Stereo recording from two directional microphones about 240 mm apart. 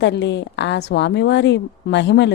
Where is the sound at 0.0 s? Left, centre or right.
Left.